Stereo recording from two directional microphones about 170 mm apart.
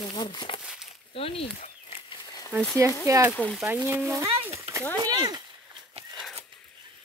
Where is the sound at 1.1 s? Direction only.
35° left (ahead or behind).